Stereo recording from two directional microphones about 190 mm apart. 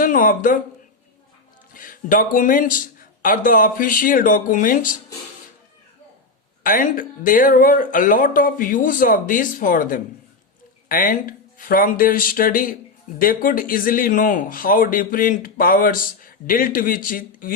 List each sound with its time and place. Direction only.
0.0 s a sound: 45° left (ahead or behind)
1.7 s speech: 45° left (ahead or behind)
6.6 s speech: 45° left (ahead or behind)